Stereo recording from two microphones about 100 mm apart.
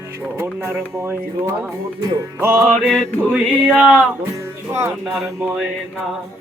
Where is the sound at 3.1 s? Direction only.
20° left (ahead or behind).